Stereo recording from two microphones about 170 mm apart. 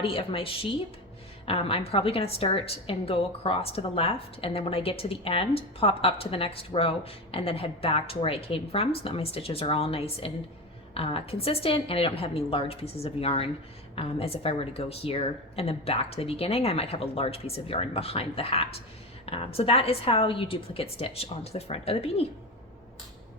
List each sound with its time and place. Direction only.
0.0 s a woman's voice: 30° left (ahead or behind)